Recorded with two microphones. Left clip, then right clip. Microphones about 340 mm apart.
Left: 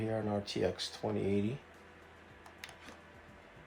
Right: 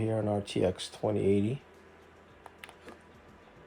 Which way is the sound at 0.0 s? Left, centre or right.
Right.